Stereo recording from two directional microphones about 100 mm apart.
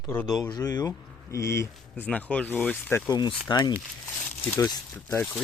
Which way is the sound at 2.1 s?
10° left (ahead or behind).